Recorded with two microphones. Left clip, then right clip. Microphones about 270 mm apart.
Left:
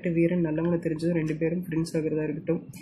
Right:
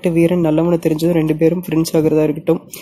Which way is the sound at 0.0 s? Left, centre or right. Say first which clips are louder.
Right 11 dB; right.